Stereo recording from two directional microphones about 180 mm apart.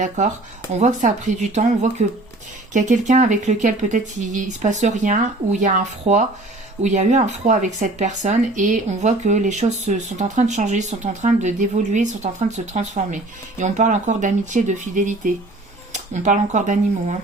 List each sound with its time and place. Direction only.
0.2 s speech: 45° right (ahead or behind)